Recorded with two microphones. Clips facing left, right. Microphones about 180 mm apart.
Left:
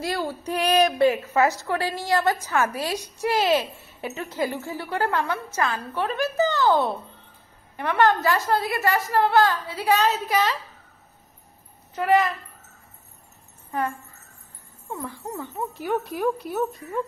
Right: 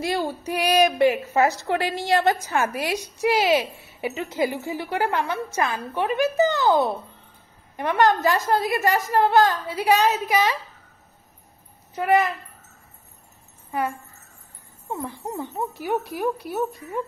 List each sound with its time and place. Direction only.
0.0 s speech: 20° right (ahead or behind)
0.5 s a woman's voice: 10° right (ahead or behind)
0.9 s a woman's voice: 20° right (ahead or behind)
11.9 s speech: 15° right (ahead or behind)
13.7 s speech: 10° right (ahead or behind)
15.8 s speech: 5° right (ahead or behind)